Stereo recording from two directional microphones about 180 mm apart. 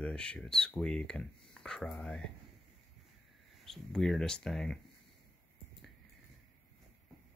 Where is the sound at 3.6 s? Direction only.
Centre (ahead or behind).